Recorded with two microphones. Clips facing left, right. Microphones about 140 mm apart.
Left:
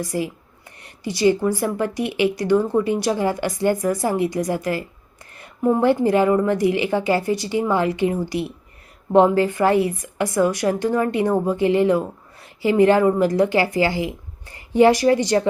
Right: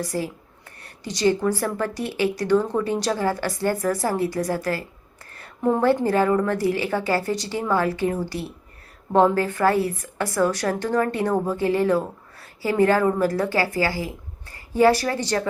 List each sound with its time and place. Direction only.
0.0 s a woman's voice: 15° left (ahead or behind)